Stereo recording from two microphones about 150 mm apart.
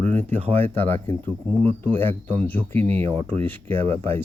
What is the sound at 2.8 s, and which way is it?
Speech, 45° right (ahead or behind).